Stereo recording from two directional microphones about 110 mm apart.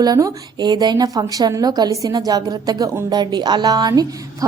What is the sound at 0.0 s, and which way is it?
A woman's voice, 35° right (ahead or behind).